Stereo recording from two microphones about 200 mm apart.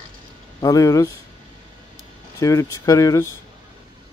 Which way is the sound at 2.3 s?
15° left (ahead or behind).